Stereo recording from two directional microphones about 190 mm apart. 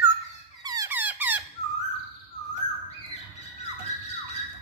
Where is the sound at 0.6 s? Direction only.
20° right (ahead or behind).